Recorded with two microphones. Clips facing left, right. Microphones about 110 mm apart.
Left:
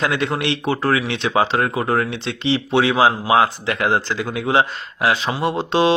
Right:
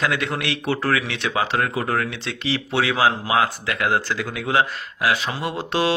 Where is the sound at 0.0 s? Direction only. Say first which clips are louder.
Left 3 dB; 20° left (ahead or behind).